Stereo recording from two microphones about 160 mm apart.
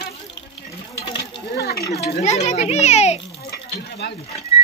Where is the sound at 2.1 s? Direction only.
45° left (ahead or behind).